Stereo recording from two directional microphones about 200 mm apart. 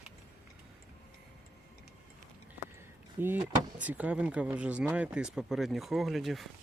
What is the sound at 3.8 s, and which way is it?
Speech, 5° right (ahead or behind).